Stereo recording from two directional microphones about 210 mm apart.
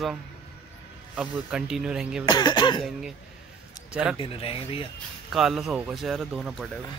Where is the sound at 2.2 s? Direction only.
20° left (ahead or behind).